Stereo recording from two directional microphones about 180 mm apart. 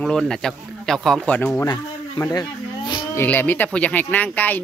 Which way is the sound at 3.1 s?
10° left (ahead or behind).